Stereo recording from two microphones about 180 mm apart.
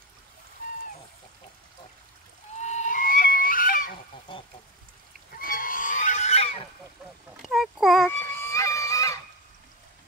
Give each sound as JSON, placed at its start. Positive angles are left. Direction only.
{"t": 2.5, "sound": "goose", "side_deg": 40}
{"t": 5.4, "sound": "goose", "side_deg": 50}
{"t": 7.4, "sound": "a sound", "side_deg": 0}
{"t": 8.1, "sound": "honk", "side_deg": 15}